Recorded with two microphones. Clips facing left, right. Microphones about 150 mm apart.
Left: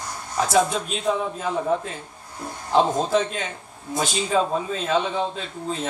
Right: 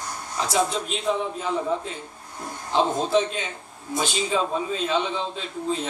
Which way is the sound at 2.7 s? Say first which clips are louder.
Left 2 dB; 45° left (ahead or behind).